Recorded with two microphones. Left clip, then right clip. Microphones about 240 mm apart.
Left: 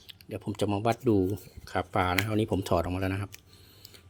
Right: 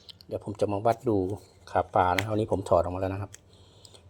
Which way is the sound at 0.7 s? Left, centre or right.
Left.